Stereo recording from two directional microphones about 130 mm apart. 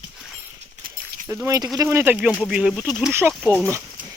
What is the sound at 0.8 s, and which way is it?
Horse, 90° right.